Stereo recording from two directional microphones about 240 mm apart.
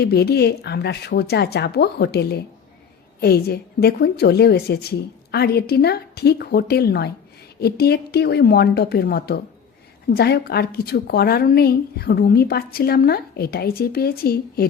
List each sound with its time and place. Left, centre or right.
0.0 s a woman's voice: left